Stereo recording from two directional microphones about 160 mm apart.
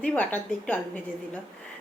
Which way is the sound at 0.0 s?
10° left (ahead or behind).